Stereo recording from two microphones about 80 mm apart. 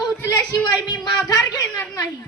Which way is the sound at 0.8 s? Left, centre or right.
Left.